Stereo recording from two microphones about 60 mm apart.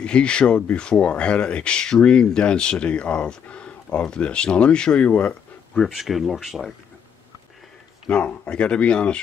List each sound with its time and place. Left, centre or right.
0.0 s speech: centre
5.8 s speech: centre
8.1 s speech: centre